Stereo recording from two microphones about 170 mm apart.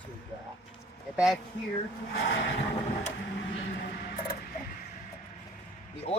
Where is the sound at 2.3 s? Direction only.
90° left.